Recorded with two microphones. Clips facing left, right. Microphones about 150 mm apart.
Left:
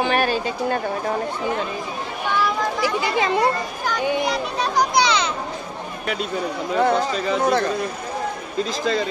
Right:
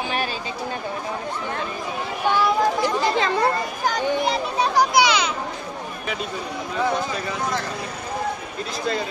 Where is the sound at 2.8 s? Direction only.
10° left (ahead or behind).